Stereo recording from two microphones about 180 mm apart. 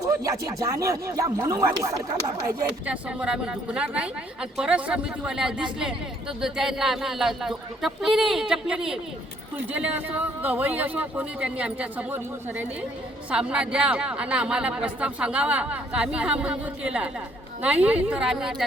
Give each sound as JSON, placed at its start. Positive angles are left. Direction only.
{"t": 0.0, "sound": "speech", "side_deg": -20}
{"t": 2.8, "sound": "a woman's voice", "side_deg": -5}